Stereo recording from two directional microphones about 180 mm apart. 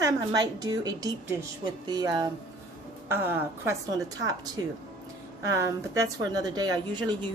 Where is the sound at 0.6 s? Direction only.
20° right (ahead or behind).